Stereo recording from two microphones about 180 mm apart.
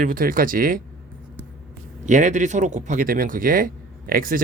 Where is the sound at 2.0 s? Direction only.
45° right (ahead or behind).